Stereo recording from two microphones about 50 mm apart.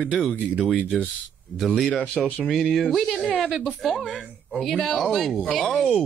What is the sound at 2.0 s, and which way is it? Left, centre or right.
Speech, left.